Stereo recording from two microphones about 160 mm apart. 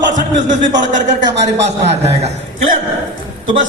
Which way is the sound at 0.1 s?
55° right (ahead or behind).